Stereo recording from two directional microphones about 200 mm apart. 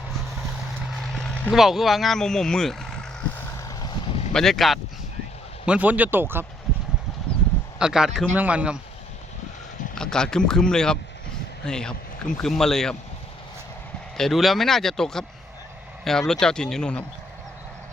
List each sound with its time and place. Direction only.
1.1 s speech: 5° left (ahead or behind)
3.6 s vehicle: 20° left (ahead or behind)
4.3 s speech: centre (ahead or behind)
7.8 s speech: 5° right (ahead or behind)
9.9 s speech: 5° left (ahead or behind)
14.2 s speech: centre (ahead or behind)